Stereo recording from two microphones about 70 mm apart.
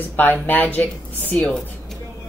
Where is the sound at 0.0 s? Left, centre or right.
Left.